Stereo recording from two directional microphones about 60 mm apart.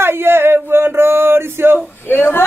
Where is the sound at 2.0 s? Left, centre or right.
Left.